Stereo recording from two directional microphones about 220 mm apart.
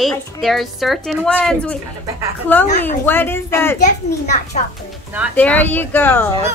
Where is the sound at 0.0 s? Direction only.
Centre (ahead or behind).